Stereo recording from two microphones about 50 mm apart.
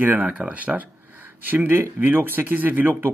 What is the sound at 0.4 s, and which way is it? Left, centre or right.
Speech, right.